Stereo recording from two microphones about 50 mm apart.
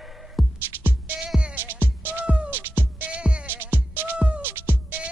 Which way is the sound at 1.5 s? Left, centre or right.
Right.